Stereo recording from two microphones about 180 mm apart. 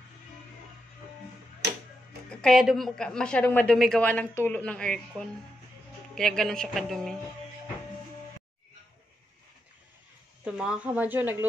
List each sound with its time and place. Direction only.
1.6 s music: 70° right (ahead or behind)
2.2 s speech: centre (ahead or behind)
10.4 s a woman's voice: 5° right (ahead or behind)